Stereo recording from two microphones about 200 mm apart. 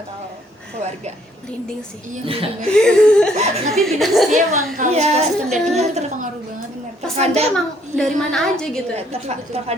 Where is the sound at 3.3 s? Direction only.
35° right (ahead or behind).